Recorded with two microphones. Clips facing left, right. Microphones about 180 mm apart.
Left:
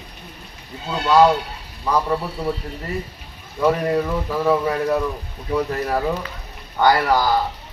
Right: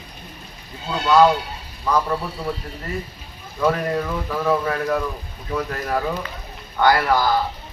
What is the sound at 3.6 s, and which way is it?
Speech, 15° left (ahead or behind).